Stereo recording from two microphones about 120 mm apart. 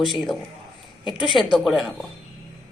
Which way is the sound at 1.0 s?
40° left (ahead or behind).